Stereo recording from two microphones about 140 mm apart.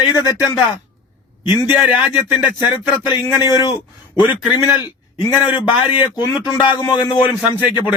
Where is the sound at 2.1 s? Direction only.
30° left (ahead or behind).